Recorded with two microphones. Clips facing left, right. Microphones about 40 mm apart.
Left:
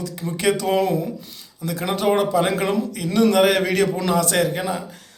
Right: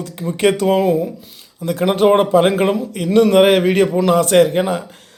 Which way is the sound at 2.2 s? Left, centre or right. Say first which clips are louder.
Right 6 dB; right.